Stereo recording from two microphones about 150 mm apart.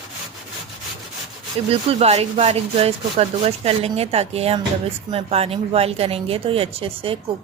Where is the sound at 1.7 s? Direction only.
45° right (ahead or behind).